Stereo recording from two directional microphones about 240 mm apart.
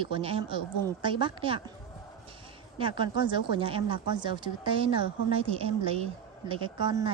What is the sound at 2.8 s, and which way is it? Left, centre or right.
A woman's voice, right.